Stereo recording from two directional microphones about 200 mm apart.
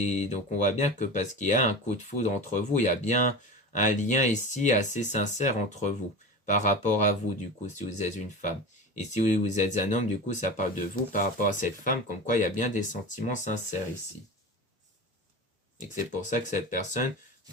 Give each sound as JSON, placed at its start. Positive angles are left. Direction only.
{"t": 0.0, "sound": "speech", "side_deg": 35}
{"t": 16.0, "sound": "speech", "side_deg": 40}